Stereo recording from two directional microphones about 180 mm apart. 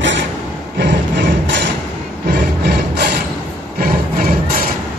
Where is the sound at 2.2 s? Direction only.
60° right (ahead or behind).